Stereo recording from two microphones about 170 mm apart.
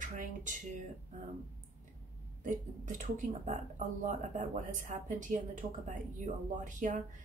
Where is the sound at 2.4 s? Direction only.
50° right (ahead or behind).